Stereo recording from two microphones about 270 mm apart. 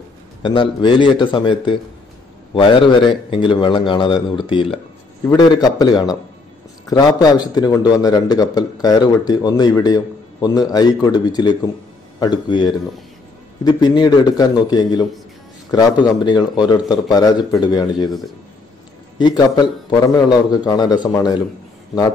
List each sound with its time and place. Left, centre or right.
0.4 s a man's voice: centre
19.1 s a man's voice: centre